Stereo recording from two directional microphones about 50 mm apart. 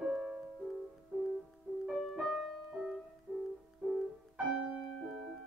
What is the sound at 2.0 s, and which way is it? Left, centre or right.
Music, centre.